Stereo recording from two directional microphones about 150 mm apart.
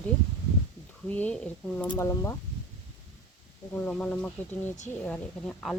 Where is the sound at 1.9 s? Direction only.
25° left (ahead or behind).